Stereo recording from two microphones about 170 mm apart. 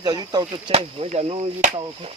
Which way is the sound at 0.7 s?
35° right (ahead or behind).